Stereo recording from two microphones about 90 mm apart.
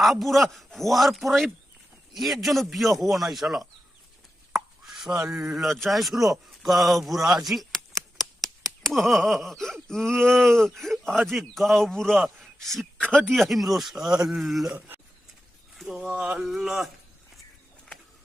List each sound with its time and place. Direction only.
0.0 s a man's voice: centre (ahead or behind)
4.5 s chopping: 5° right (ahead or behind)
5.5 s a man's voice: centre (ahead or behind)
12.8 s speech: 20° right (ahead or behind)
13.3 s a man's voice: centre (ahead or behind)
14.7 s speech: 20° right (ahead or behind)
15.8 s speech: 5° right (ahead or behind)
16.1 s speech: 15° right (ahead or behind)
16.4 s a man's voice: 5° right (ahead or behind)